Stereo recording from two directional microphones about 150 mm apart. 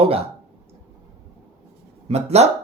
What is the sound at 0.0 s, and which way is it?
Speech, 40° right (ahead or behind).